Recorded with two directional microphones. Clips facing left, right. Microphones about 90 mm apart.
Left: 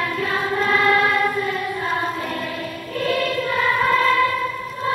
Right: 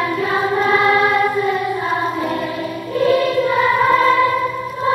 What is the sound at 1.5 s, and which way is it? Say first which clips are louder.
Music: right 5 dB; 15° right (ahead or behind).